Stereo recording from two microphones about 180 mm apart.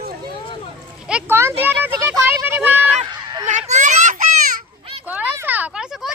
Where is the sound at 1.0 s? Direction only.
10° right (ahead or behind).